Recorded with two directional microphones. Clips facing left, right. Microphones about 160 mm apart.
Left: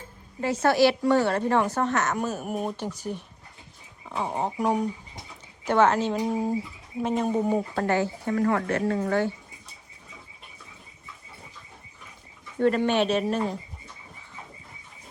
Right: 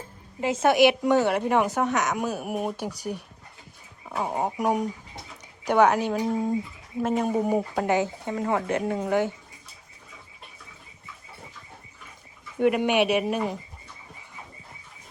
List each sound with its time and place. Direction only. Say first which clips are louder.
0.4 s speech: right 1 dB; 20° right (ahead or behind)
6.1 s speech: right 1 dB; 5° left (ahead or behind)
7.0 s speech: right 1 dB; 5° right (ahead or behind)
12.5 s speech: right 1 dB; 15° right (ahead or behind)